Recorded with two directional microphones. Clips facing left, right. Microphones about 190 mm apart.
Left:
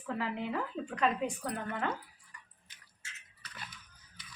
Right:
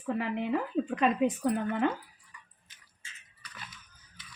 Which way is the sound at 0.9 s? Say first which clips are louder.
Right 4 dB; 20° right (ahead or behind).